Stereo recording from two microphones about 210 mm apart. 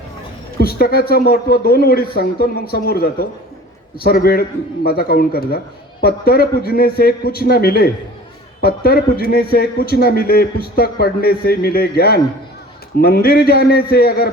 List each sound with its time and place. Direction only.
0.6 s a man's voice: 45° left (ahead or behind)